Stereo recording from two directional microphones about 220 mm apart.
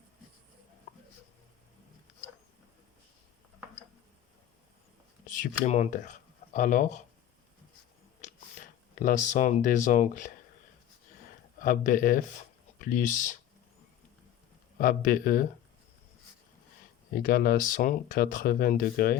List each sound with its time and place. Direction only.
0.9 s a sound: 35° left (ahead or behind)
5.2 s speech: 35° left (ahead or behind)
8.2 s speech: 35° left (ahead or behind)
11.6 s speech: 40° left (ahead or behind)
14.8 s speech: 40° left (ahead or behind)
17.2 s speech: 40° left (ahead or behind)